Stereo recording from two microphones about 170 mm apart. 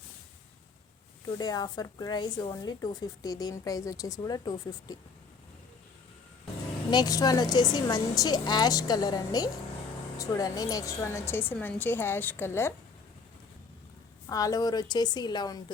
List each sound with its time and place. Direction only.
1.4 s speech: 25° left (ahead or behind)
6.9 s a woman's voice: 20° left (ahead or behind)
14.3 s speech: 20° left (ahead or behind)